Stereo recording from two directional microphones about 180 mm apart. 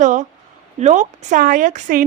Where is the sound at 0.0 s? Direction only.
45° right (ahead or behind).